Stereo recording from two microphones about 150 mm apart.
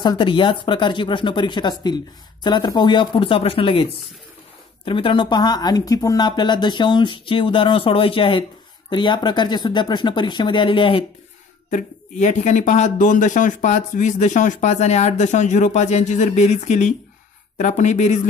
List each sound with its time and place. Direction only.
0.0 s speech: 30° left (ahead or behind)
11.7 s speech: 50° left (ahead or behind)